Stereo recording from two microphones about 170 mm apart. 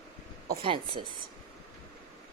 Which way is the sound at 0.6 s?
30° right (ahead or behind).